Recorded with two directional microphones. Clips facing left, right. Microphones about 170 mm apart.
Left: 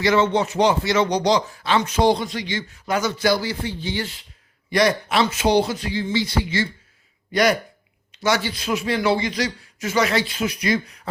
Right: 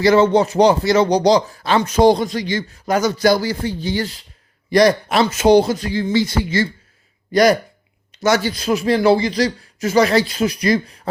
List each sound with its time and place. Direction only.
0.0 s speech: 35° right (ahead or behind)
8.2 s speech: 45° right (ahead or behind)